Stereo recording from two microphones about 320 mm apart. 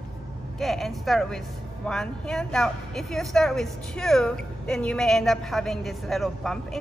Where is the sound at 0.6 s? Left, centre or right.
Centre.